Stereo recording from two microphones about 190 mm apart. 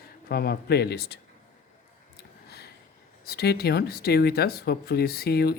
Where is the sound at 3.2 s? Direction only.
55° left (ahead or behind).